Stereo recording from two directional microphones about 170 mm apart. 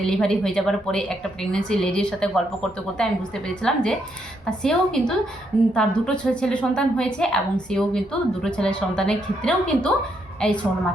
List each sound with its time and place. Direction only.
0.0 s a woman's voice: 5° left (ahead or behind)